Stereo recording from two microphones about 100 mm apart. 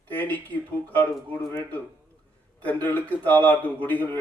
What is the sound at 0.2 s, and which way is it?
A man's voice, 15° left (ahead or behind).